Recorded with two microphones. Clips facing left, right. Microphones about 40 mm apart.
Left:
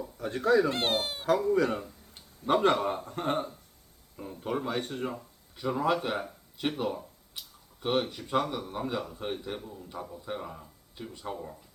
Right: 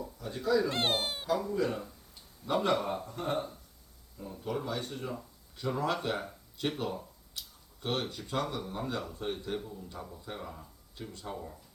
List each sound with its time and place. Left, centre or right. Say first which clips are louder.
0.2 s speech: left 5 dB; left
0.7 s speech: left 2 dB; centre
1.3 s speech: left 6 dB; left
2.5 s a man's voice: left 4 dB; left
5.5 s speech: left 4 dB; centre
7.3 s a sound: left 1 dB; centre
8.3 s a man's voice: left 4 dB; centre